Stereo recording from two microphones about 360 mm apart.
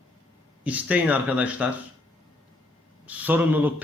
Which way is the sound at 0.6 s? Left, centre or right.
Centre.